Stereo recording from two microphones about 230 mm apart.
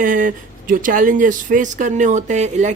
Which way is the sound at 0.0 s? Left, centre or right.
Right.